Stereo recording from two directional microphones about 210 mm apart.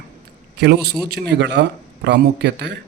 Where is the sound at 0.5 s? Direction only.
55° right (ahead or behind).